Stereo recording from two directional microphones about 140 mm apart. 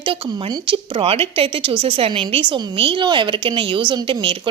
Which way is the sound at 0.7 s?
40° right (ahead or behind).